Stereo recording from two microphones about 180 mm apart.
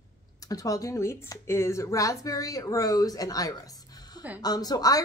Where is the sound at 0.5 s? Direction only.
20° left (ahead or behind).